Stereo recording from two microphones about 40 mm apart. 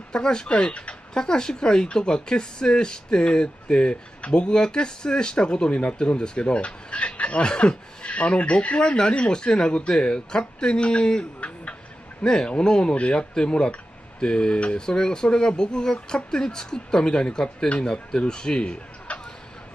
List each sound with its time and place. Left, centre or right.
0.1 s speech: centre
1.1 s speech: centre
19.1 s a sound: left